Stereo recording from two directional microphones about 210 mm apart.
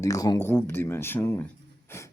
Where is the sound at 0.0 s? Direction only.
15° left (ahead or behind).